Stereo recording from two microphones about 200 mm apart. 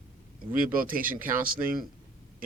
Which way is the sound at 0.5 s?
45° right (ahead or behind).